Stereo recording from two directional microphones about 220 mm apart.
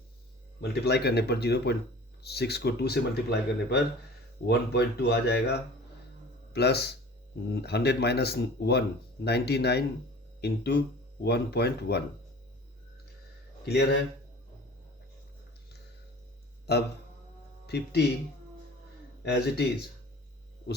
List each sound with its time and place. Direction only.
0.6 s speech: 45° left (ahead or behind)
13.7 s speech: 50° left (ahead or behind)
16.7 s speech: 45° left (ahead or behind)
19.2 s speech: 50° left (ahead or behind)